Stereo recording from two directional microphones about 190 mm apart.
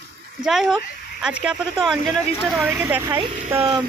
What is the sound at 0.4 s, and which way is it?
Speech, centre (ahead or behind).